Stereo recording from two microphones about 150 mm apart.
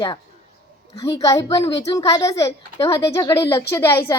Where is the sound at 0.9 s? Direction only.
25° left (ahead or behind).